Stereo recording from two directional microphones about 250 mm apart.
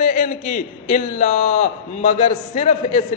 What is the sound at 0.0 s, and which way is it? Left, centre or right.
A man's voice, left.